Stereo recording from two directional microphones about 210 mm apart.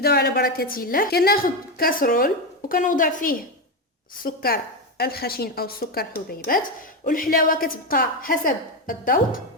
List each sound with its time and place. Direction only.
0.0 s a woman's voice: 50° left (ahead or behind)